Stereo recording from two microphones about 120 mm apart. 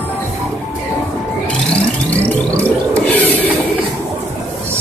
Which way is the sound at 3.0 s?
15° left (ahead or behind).